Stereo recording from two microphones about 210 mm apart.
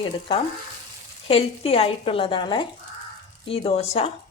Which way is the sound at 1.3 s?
25° left (ahead or behind).